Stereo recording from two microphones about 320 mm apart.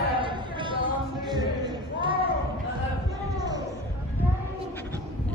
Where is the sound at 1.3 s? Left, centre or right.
Centre.